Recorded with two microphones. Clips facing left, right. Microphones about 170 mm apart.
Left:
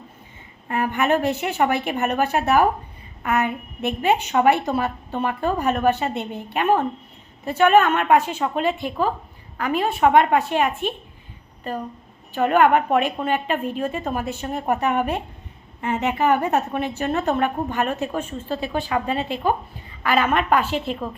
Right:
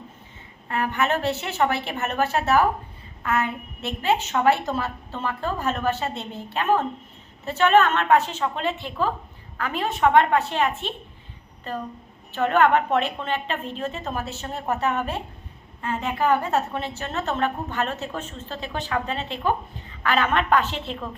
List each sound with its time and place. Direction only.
0.7 s a woman's voice: 15° left (ahead or behind)